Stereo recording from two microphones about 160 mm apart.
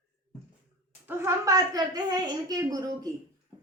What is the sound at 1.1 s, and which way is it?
A woman's voice, 15° right (ahead or behind).